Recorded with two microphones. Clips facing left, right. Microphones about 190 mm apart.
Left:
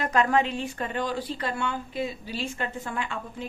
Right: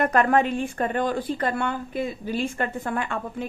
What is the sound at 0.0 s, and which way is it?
A woman's voice, 55° right (ahead or behind).